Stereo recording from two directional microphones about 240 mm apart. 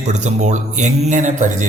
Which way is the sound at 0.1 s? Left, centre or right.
Right.